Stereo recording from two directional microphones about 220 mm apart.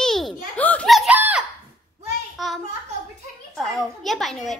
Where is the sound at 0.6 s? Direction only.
5° left (ahead or behind).